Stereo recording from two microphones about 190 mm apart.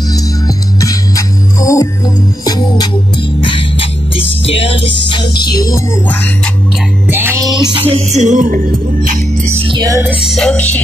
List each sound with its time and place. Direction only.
0.1 s music: 20° left (ahead or behind)
7.1 s music: 10° right (ahead or behind)
7.9 s music: 35° right (ahead or behind)
9.6 s music: 25° right (ahead or behind)
10.0 s music: 5° left (ahead or behind)